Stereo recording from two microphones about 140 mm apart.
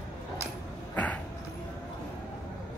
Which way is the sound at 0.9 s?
10° left (ahead or behind).